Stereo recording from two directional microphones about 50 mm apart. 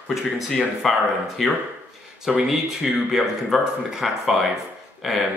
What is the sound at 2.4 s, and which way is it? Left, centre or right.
Speech, centre.